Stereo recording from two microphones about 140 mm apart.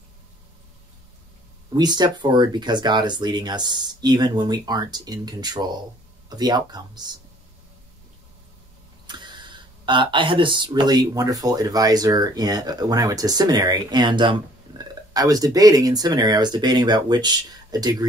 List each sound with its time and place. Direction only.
1.8 s speech: 30° right (ahead or behind)
9.0 s speech: 30° right (ahead or behind)